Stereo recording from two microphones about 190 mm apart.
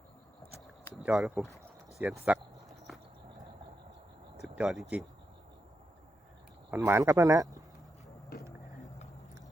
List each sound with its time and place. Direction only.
1.0 s speech: centre (ahead or behind)
2.0 s a sound: 5° right (ahead or behind)
4.4 s speech: centre (ahead or behind)
6.7 s speech: 10° right (ahead or behind)